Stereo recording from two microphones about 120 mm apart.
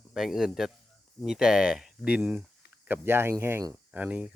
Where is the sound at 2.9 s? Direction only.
20° right (ahead or behind).